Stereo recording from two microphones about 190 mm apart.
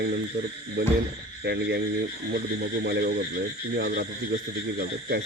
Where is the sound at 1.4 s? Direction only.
60° right (ahead or behind).